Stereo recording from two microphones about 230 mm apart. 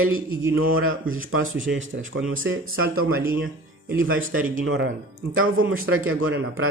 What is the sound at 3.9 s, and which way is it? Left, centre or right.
A man's voice, right.